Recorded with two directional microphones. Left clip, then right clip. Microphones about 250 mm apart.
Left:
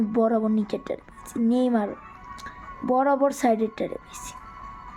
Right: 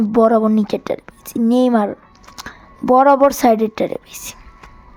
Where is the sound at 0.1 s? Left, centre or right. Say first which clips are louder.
Right 11 dB; centre.